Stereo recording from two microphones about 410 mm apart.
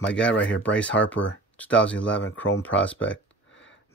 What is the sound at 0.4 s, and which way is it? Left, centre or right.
Speech, left.